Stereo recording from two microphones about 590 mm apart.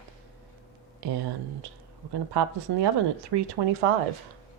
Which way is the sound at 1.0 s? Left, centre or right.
Right.